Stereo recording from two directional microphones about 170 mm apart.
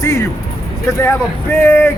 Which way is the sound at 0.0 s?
20° left (ahead or behind).